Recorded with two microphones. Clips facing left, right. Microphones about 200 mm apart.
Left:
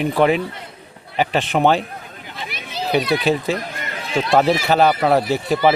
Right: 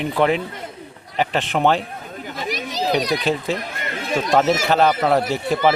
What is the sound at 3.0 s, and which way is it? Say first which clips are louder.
Speech: left 2 dB; 40° right (ahead or behind).